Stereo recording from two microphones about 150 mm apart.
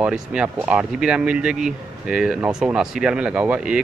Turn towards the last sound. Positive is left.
turn(degrees=-10)  # may be behind; listen again after turning